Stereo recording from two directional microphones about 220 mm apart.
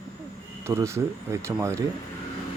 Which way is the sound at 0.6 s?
10° right (ahead or behind).